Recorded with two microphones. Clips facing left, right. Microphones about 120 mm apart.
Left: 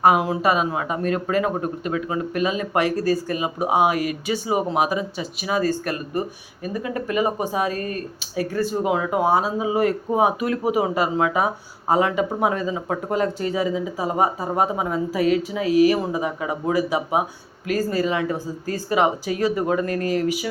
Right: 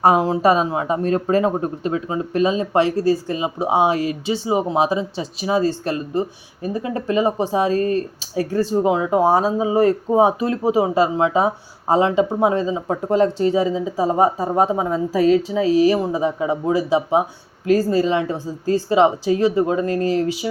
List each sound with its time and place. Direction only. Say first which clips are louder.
0.0 s speech: right 3 dB; 30° right (ahead or behind)